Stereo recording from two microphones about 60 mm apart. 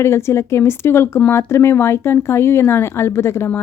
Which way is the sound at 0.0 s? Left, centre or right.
Left.